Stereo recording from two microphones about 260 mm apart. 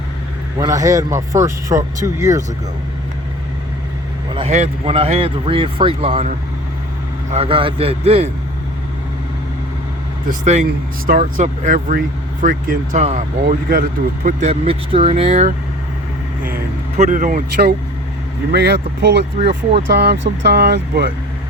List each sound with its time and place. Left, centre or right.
0.6 s speech: centre
4.4 s speech: right
10.2 s speech: right
17.0 s speech: right
19.4 s speech: right
19.9 s speech: right